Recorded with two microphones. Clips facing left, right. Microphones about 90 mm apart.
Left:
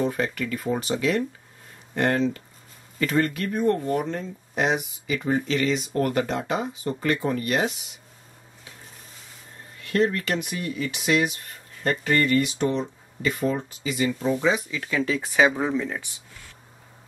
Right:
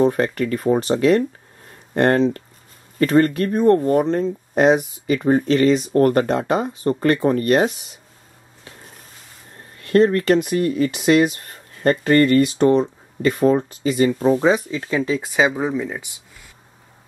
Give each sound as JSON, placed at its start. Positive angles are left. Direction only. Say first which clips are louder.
{"t": 0.0, "sound": "speech", "louder": "right 8 dB", "side_deg": -45}
{"t": 9.8, "sound": "speech", "louder": "right 8 dB", "side_deg": -45}